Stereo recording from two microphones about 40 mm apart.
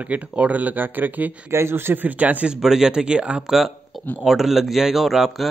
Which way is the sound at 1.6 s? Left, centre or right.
Right.